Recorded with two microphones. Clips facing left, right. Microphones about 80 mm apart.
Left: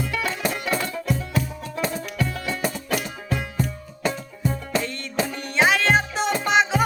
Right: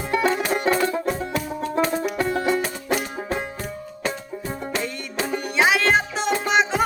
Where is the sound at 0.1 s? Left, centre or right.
Right.